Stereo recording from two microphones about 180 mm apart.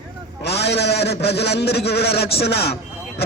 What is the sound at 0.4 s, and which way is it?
A man's voice, 65° left (ahead or behind).